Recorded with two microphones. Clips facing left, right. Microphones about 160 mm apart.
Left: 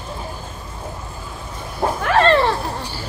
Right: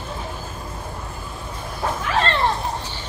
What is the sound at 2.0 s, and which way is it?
Roaring cats, 80° left.